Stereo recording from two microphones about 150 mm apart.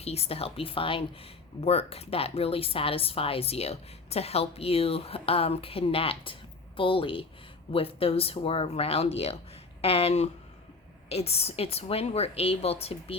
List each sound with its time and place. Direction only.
0.0 s a woman's voice: 45° left (ahead or behind)